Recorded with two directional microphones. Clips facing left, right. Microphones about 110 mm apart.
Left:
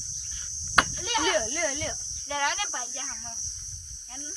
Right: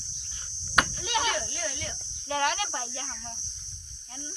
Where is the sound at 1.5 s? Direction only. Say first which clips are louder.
Left 6 dB; 50° left (ahead or behind).